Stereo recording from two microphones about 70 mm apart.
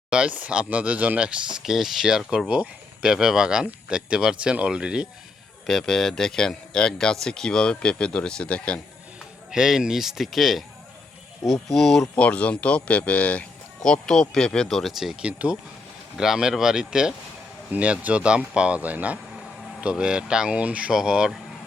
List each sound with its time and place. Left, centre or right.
0.1 s speech: centre
5.6 s speech: centre
9.5 s speech: centre
12.1 s speech: centre
13.8 s speech: centre
15.2 s speech: centre
16.1 s speech: centre